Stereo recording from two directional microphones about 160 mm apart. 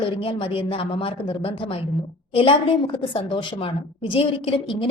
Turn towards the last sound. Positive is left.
turn(degrees=35)  # may be behind; listen again after turning